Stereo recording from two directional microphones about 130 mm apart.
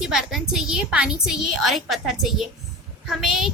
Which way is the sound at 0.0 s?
5° right (ahead or behind).